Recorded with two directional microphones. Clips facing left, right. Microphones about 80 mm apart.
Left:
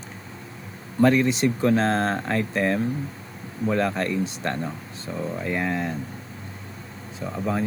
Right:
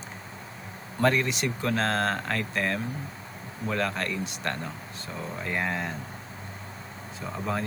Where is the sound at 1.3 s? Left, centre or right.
Left.